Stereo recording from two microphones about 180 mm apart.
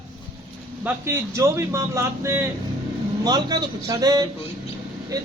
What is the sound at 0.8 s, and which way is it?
A man's voice, 15° right (ahead or behind).